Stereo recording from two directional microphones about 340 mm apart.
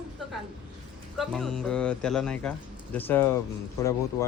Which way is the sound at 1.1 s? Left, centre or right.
Centre.